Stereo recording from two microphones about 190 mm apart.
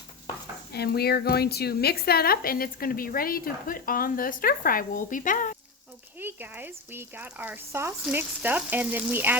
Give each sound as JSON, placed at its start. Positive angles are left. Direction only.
{"t": 0.7, "sound": "a woman's voice", "side_deg": 55}
{"t": 6.1, "sound": "speech", "side_deg": -10}